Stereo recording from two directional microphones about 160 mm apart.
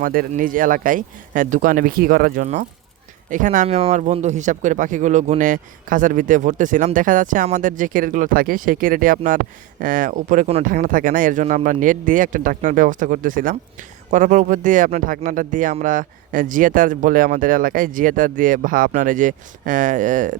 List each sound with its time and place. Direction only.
0.0 s speech: 60° right (ahead or behind)
3.8 s speech: 40° right (ahead or behind)
10.7 s speech: 60° right (ahead or behind)